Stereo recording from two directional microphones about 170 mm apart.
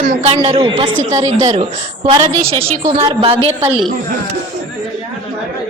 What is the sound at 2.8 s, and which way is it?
Speech, 30° right (ahead or behind).